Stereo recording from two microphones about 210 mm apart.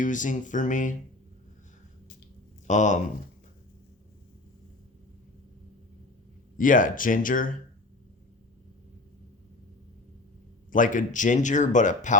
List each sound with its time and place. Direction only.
0.0 s speech: 35° left (ahead or behind)
2.6 s speech: 35° left (ahead or behind)
6.6 s speech: 40° left (ahead or behind)
10.7 s speech: 40° left (ahead or behind)